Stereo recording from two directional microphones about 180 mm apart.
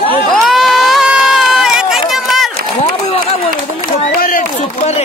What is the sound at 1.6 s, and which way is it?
Run, 5° right (ahead or behind).